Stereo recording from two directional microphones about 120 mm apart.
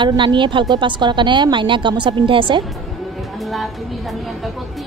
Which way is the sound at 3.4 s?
Centre (ahead or behind).